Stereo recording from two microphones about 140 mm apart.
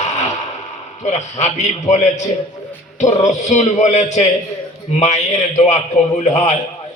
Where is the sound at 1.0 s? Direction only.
55° left (ahead or behind).